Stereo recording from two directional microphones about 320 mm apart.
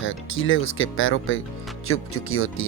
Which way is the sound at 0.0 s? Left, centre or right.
Left.